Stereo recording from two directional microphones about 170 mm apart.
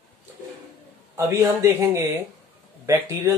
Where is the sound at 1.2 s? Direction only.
15° right (ahead or behind).